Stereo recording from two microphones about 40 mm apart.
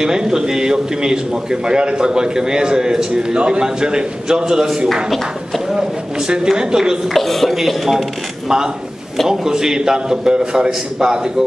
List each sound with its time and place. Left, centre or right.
0.0 s a man's voice: centre
7.2 s speech: centre
9.3 s a man's voice: centre